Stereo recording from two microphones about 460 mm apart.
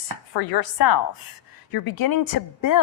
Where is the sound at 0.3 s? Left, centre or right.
Left.